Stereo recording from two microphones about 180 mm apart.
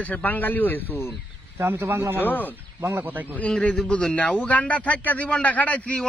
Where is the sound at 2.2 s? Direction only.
10° left (ahead or behind).